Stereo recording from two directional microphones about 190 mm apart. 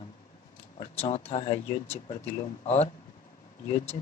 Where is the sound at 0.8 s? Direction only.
30° left (ahead or behind).